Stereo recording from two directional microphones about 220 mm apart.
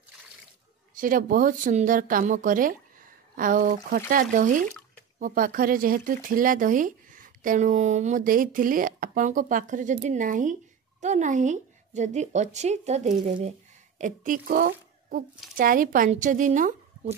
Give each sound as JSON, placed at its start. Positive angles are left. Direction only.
{"t": 0.9, "sound": "speech", "side_deg": -40}